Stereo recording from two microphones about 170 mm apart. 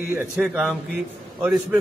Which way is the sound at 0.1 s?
10° right (ahead or behind).